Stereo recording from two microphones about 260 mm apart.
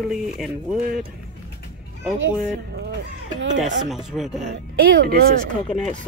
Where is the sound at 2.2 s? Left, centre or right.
Right.